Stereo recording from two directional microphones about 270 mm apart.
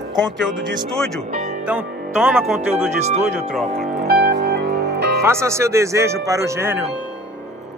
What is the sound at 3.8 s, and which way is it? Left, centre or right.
Music, right.